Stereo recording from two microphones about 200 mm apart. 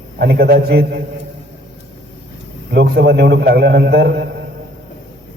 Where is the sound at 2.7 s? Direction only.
55° right (ahead or behind).